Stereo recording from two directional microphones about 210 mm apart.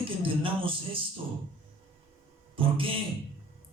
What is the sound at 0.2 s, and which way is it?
Music, 25° right (ahead or behind).